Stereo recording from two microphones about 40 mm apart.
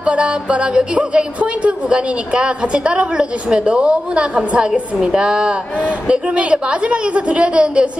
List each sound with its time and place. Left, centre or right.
0.0 s speech: right